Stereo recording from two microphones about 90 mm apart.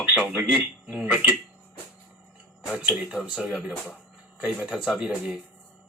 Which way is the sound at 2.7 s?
10° right (ahead or behind).